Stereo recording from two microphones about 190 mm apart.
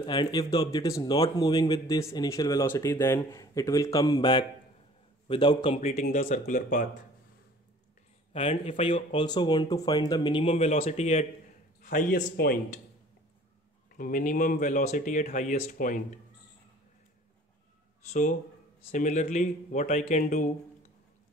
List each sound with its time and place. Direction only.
0.0 s speech: 20° left (ahead or behind)
5.8 s speech: 35° left (ahead or behind)
8.3 s a man's voice: 30° left (ahead or behind); by 12.8 s 45° left (ahead or behind)
13.9 s speech: 45° left (ahead or behind)
18.9 s speech: 40° left (ahead or behind)